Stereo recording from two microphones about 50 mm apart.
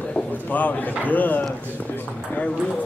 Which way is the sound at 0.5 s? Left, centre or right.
Left.